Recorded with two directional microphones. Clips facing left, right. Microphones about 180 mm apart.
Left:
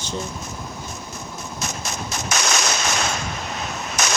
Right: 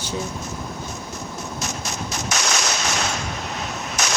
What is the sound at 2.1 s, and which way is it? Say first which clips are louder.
Gunshot: left 2 dB; 50° left (ahead or behind).